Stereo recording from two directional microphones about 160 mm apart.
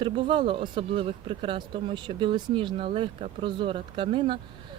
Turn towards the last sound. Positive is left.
turn(degrees=-35)  # may be behind; listen again after turning